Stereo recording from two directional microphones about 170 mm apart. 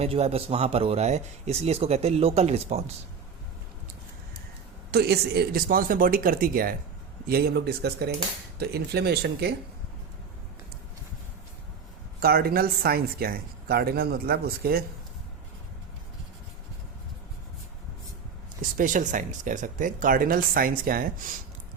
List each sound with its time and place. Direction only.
0.0 s speech: 35° right (ahead or behind)
4.9 s speech: 70° right (ahead or behind)
12.2 s speech: 65° right (ahead or behind)
18.6 s speech: 50° right (ahead or behind)